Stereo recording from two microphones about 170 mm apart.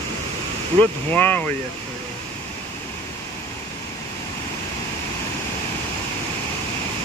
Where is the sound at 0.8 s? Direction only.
10° left (ahead or behind).